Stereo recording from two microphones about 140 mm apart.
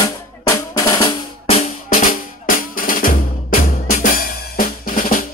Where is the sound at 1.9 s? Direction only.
80° left.